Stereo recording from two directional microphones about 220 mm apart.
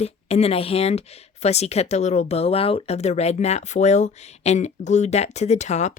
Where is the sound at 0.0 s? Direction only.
30° left (ahead or behind).